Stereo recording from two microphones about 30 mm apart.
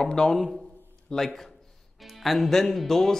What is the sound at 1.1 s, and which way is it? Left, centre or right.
Speech, left.